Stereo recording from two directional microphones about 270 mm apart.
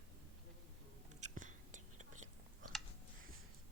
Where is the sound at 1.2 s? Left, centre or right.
Right.